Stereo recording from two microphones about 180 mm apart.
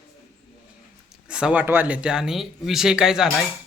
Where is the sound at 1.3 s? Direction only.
5° right (ahead or behind).